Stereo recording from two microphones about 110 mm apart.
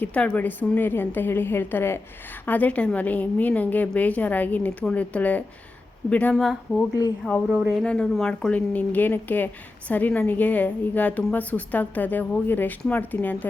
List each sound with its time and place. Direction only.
0.0 s a woman's voice: 15° left (ahead or behind)
6.3 s a woman's voice: centre (ahead or behind); by 13.5 s 15° left (ahead or behind)